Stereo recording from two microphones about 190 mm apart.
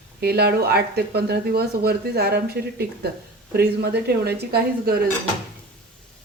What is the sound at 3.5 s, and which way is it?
Speech, 55° right (ahead or behind).